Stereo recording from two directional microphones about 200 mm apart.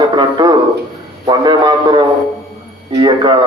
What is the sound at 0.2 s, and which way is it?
A man's voice, 20° right (ahead or behind).